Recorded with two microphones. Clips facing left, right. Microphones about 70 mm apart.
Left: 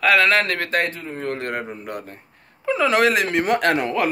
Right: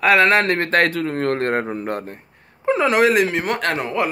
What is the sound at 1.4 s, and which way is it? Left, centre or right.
Speech, right.